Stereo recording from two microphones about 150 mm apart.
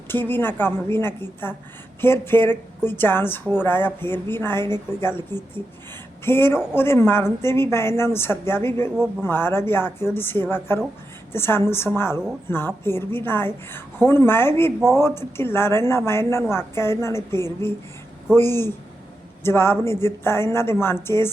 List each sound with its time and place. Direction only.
0.1 s a woman's voice: 15° left (ahead or behind)